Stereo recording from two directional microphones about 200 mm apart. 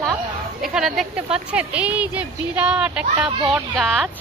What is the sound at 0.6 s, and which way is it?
A woman's voice, centre (ahead or behind).